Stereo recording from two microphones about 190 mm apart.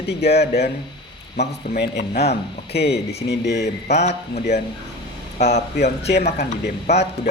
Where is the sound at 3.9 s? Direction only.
35° left (ahead or behind).